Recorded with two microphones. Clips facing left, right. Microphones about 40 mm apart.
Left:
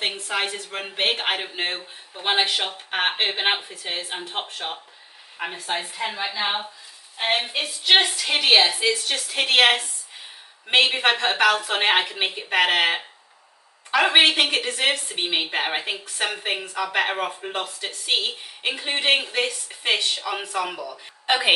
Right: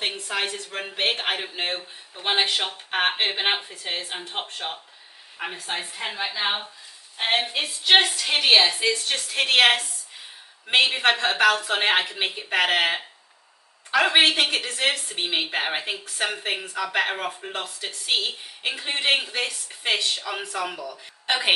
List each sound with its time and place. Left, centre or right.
0.0 s a woman's voice: centre
7.9 s a woman's voice: centre